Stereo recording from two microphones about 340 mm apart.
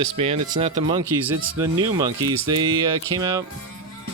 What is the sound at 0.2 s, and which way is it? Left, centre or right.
Speech, centre.